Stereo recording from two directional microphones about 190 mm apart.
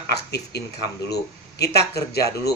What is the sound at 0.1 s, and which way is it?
A man's voice, 60° left (ahead or behind).